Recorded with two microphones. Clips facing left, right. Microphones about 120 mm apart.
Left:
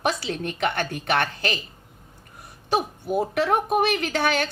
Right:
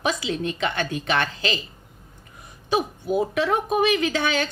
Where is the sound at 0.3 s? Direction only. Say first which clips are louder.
Even; 55° left (ahead or behind).